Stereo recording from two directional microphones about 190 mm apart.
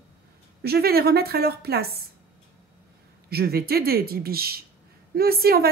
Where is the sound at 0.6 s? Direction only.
55° right (ahead or behind).